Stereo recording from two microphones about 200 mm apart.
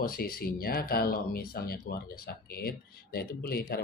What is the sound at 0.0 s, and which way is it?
Speech, 50° left (ahead or behind).